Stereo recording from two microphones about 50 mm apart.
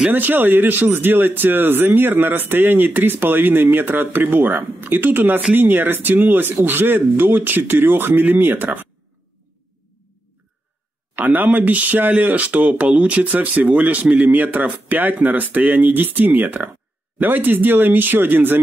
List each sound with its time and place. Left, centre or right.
0.1 s speech: right
11.1 s speech: right